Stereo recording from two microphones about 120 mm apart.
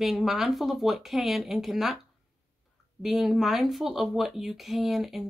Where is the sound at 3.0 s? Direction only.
5° right (ahead or behind).